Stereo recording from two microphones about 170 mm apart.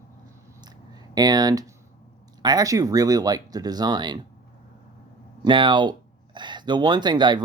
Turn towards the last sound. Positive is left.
turn(degrees=-25)  # may be behind; listen again after turning